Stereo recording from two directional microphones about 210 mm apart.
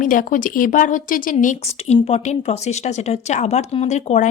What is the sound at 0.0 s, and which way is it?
Speech, 40° left (ahead or behind).